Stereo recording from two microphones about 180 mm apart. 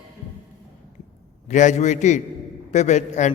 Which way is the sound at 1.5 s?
40° left (ahead or behind).